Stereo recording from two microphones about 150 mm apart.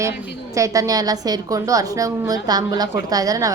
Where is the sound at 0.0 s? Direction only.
20° right (ahead or behind).